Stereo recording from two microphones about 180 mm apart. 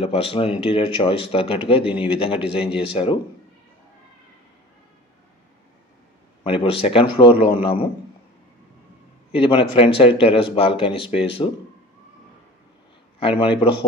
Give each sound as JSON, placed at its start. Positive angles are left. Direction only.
{"t": 0.0, "sound": "a man's voice", "side_deg": 30}
{"t": 6.4, "sound": "a man's voice", "side_deg": 30}
{"t": 9.3, "sound": "speech", "side_deg": 30}
{"t": 13.4, "sound": "speech", "side_deg": 30}